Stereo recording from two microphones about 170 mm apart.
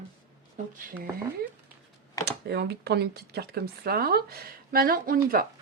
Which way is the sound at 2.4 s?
70° right (ahead or behind).